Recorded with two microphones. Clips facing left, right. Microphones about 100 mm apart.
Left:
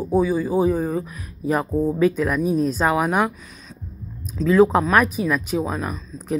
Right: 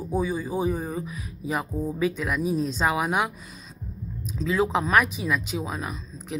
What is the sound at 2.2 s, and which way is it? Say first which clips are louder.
Speech: left 5 dB; 5° right (ahead or behind).